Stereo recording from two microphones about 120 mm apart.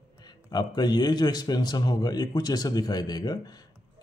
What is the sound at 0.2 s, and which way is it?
A man's voice, 35° left (ahead or behind).